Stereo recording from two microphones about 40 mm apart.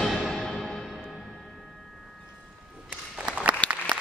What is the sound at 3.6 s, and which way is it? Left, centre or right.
Applause, left.